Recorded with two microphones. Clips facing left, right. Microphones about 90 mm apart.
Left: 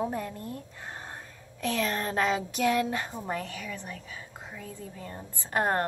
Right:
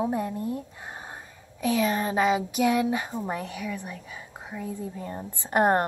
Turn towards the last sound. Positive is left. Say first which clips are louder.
# right 5 dB
turn(degrees=-20)  # may be behind; listen again after turning